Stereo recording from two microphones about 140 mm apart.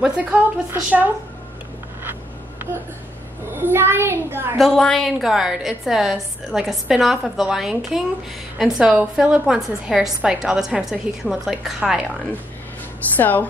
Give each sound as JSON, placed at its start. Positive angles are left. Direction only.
{"t": 0.0, "sound": "a woman's voice", "side_deg": -10}
{"t": 3.7, "sound": "a woman's voice", "side_deg": -15}
{"t": 4.6, "sound": "a woman's voice", "side_deg": 5}
{"t": 13.1, "sound": "a woman's voice", "side_deg": 10}